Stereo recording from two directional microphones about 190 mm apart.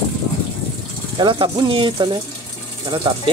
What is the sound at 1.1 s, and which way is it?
Speech, 25° right (ahead or behind).